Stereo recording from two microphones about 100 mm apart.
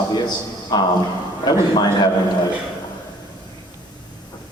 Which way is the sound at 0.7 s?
40° left (ahead or behind).